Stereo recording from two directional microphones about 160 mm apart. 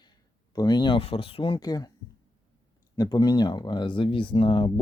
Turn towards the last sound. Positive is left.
turn(degrees=30)  # may be behind; listen again after turning